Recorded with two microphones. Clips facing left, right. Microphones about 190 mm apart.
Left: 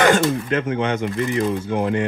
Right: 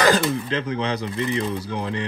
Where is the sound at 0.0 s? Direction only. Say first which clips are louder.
Left 3 dB; 35° right (ahead or behind).